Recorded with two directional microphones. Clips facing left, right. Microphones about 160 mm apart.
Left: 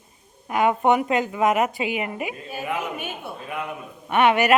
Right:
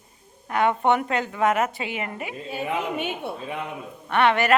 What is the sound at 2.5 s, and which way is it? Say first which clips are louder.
Speech: right 4 dB; 25° right (ahead or behind).